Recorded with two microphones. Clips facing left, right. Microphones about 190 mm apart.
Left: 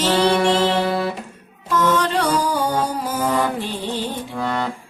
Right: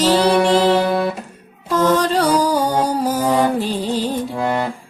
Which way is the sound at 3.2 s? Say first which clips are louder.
Right 3 dB; 15° right (ahead or behind).